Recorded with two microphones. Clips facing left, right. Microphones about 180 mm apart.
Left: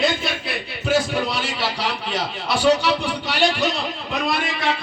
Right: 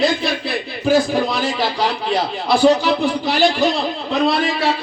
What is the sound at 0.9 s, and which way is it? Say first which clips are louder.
Speech: right 5 dB; 35° right (ahead or behind).